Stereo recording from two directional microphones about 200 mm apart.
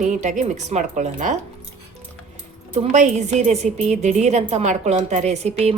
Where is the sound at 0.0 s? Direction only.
35° right (ahead or behind).